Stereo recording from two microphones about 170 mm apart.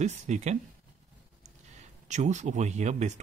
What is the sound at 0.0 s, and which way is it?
Speech, 40° right (ahead or behind).